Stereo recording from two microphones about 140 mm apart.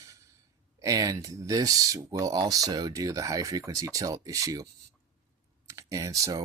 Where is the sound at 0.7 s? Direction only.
25° right (ahead or behind).